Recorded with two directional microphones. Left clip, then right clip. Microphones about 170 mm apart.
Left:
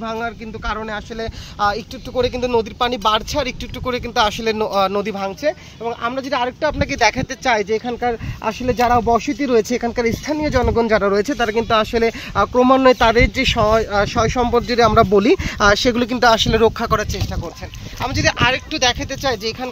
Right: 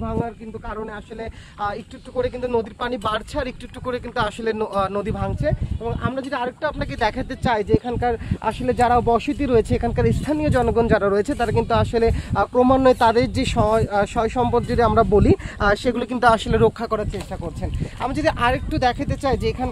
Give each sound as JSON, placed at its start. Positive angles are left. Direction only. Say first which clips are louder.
{"t": 0.0, "sound": "speech", "louder": "left 3 dB", "side_deg": 30}
{"t": 18.0, "sound": "speech", "louder": "left 3 dB", "side_deg": -35}
{"t": 18.7, "sound": "speech", "louder": "left 3 dB", "side_deg": -60}